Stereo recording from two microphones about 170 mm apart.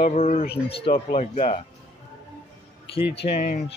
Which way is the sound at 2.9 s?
35° left (ahead or behind).